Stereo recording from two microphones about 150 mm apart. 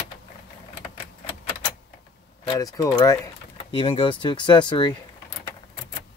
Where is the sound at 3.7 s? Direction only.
40° left (ahead or behind).